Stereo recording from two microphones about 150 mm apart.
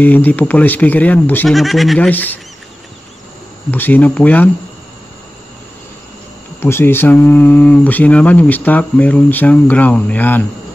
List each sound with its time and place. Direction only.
0.0 s speech: 10° left (ahead or behind)
1.5 s speech: centre (ahead or behind)
2.0 s speech: 10° left (ahead or behind)
3.7 s speech: 10° left (ahead or behind)
6.6 s speech: 15° left (ahead or behind)